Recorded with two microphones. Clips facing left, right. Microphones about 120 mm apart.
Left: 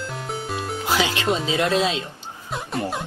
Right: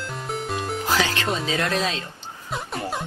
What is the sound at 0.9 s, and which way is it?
Music, 15° left (ahead or behind).